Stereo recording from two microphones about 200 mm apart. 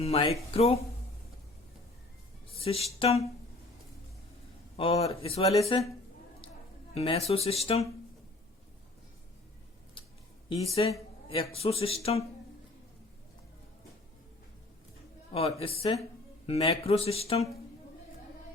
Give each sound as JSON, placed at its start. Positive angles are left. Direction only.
{"t": 0.0, "sound": "speech", "side_deg": 30}
{"t": 2.5, "sound": "a sound", "side_deg": 30}
{"t": 3.0, "sound": "speech", "side_deg": 30}
{"t": 4.8, "sound": "speech", "side_deg": 30}
{"t": 6.9, "sound": "speech", "side_deg": 30}
{"t": 10.8, "sound": "speech", "side_deg": 25}
{"t": 15.3, "sound": "speech", "side_deg": 30}